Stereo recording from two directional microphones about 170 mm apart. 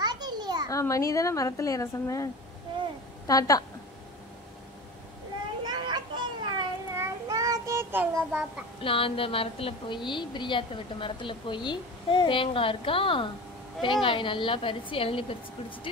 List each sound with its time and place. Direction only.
0.0 s a sound: 25° right (ahead or behind)
0.7 s a child's voice: 20° left (ahead or behind)
3.3 s a child's voice: 20° left (ahead or behind)
5.7 s children playing: 25° right (ahead or behind)
7.0 s child singing: 20° right (ahead or behind)
8.8 s a woman's voice: 30° left (ahead or behind)